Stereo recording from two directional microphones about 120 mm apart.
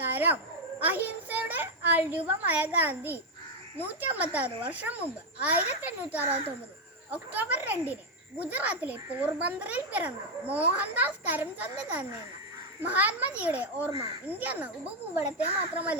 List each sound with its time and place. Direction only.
0.0 s a sound: 15° right (ahead or behind)
0.8 s a child's voice: 15° right (ahead or behind)
4.1 s a child's voice: 10° right (ahead or behind)